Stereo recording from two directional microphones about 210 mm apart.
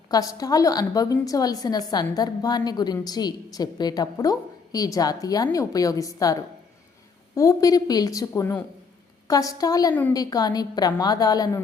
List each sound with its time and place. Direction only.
0.1 s a woman's voice: 15° left (ahead or behind)